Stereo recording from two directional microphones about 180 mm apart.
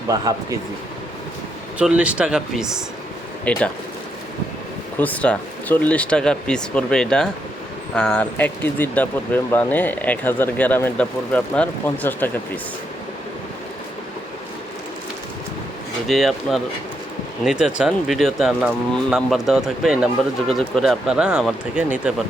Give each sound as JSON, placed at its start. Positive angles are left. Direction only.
{"t": 0.1, "sound": "speech", "side_deg": -20}
{"t": 1.8, "sound": "speech", "side_deg": -5}
{"t": 3.5, "sound": "speech", "side_deg": 5}
{"t": 4.9, "sound": "speech", "side_deg": 10}
{"t": 16.0, "sound": "speech", "side_deg": 0}